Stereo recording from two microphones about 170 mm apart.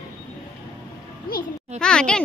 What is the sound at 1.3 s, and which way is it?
Speech, 60° left (ahead or behind).